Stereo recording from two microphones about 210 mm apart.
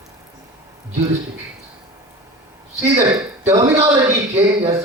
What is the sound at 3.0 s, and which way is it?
Speech, 15° right (ahead or behind).